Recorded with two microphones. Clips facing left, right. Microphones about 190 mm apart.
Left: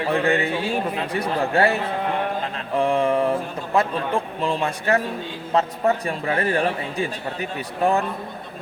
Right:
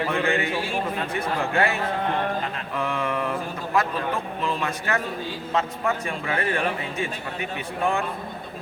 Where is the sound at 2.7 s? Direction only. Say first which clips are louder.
Left 8 dB; 30° left (ahead or behind).